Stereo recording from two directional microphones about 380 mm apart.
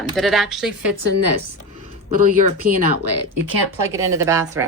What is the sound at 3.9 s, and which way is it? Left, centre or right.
Speech, centre.